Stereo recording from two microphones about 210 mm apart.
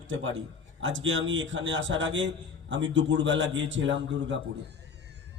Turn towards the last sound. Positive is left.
turn(degrees=-60)  # may be behind; listen again after turning